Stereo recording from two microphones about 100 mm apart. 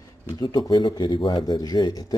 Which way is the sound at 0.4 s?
35° left (ahead or behind).